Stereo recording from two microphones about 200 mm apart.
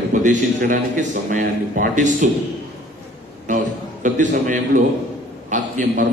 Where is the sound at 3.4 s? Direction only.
40° right (ahead or behind).